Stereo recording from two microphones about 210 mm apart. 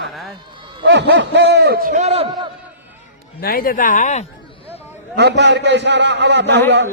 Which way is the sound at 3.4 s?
45° left (ahead or behind).